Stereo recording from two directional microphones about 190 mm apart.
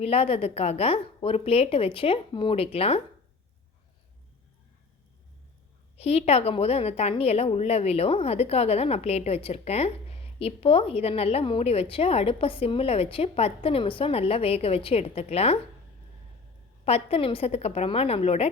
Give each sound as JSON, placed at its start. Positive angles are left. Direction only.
{"t": 0.0, "sound": "a woman's voice", "side_deg": 30}
{"t": 6.0, "sound": "a woman's voice", "side_deg": 35}
{"t": 16.8, "sound": "a woman's voice", "side_deg": 30}